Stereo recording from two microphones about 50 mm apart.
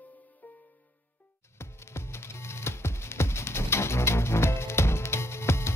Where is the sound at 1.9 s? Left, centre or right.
Left.